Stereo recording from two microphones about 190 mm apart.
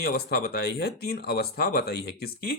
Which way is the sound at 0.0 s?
55° left (ahead or behind).